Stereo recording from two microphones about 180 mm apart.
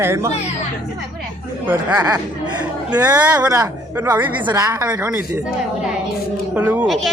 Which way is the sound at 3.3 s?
15° right (ahead or behind).